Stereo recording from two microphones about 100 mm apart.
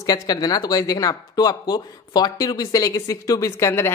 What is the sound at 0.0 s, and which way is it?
Speech, 40° left (ahead or behind).